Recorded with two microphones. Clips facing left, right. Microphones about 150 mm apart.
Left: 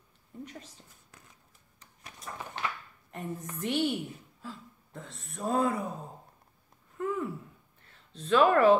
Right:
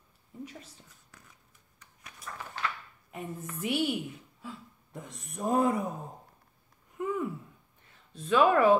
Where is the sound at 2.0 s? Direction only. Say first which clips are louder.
Left 2 dB; 25° left (ahead or behind).